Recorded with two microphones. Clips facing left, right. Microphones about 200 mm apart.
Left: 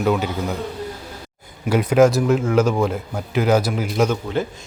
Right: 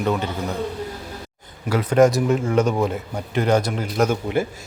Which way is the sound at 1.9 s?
Centre (ahead or behind).